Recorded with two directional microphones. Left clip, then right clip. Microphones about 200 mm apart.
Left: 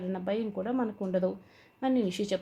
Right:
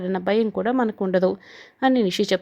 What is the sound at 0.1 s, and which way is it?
Speech, 40° right (ahead or behind).